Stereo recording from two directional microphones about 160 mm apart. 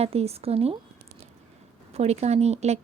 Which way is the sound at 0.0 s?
40° right (ahead or behind).